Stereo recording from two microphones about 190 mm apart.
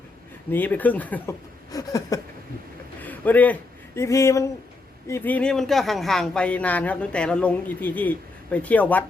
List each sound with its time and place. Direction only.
0.5 s speech: 10° left (ahead or behind)
1.7 s a sound: 20° left (ahead or behind)
3.0 s speech: 10° left (ahead or behind)